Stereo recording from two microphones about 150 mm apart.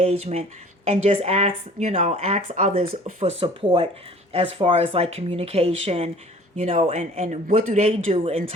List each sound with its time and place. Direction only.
0.0 s speech: 45° right (ahead or behind)